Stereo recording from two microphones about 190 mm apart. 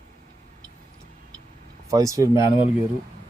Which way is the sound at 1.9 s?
15° right (ahead or behind).